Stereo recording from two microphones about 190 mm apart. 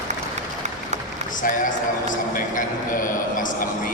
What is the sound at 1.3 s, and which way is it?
A man's voice, 45° left (ahead or behind).